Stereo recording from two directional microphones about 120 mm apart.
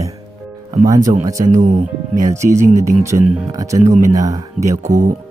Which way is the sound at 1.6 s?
90° right.